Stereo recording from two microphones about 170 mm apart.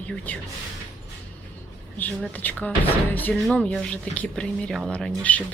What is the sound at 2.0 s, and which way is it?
Speech, 10° left (ahead or behind).